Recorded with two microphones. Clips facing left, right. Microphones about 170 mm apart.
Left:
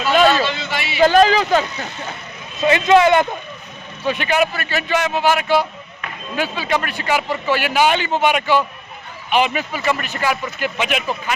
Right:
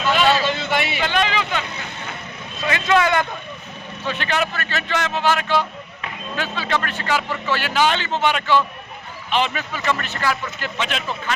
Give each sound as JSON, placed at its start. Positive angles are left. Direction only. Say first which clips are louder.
{"t": 0.4, "sound": "a sound", "louder": "right 2 dB", "side_deg": -50}
{"t": 0.9, "sound": "speech", "louder": "left 9 dB", "side_deg": 40}
{"t": 2.6, "sound": "a man's voice", "louder": "left 6 dB", "side_deg": 20}